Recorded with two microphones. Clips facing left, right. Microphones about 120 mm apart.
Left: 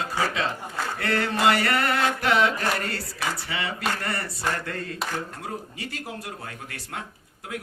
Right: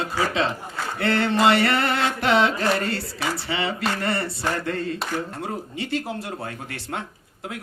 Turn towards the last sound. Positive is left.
turn(degrees=-25)  # may be behind; listen again after turning